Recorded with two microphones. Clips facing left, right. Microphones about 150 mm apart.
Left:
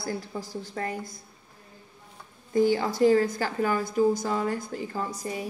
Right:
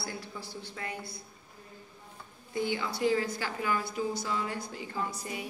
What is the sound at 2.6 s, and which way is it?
Speech, 40° left (ahead or behind).